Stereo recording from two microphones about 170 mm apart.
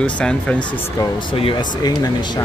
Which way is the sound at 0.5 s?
30° left (ahead or behind).